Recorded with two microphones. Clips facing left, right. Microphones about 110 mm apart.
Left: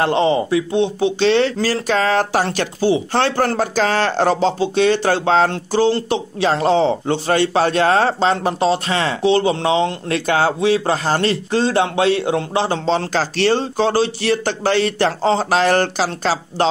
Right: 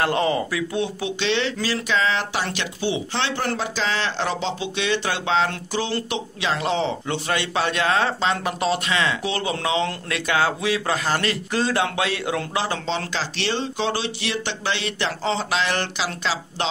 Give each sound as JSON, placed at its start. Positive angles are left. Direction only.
{"t": 0.0, "sound": "speech", "side_deg": 25}
{"t": 1.2, "sound": "speech", "side_deg": 40}